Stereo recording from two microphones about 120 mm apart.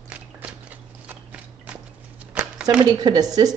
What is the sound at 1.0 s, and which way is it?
Horse, 10° right (ahead or behind).